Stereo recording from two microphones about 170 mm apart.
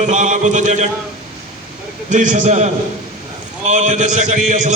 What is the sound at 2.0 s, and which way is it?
Mantra, 45° right (ahead or behind).